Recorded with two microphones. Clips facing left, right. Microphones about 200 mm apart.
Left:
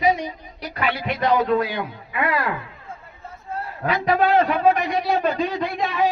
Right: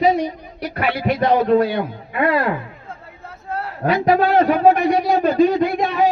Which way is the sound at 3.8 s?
40° right (ahead or behind).